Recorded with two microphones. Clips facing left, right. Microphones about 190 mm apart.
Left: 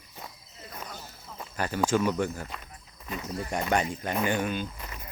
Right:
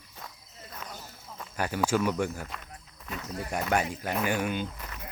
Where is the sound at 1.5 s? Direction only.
10° right (ahead or behind).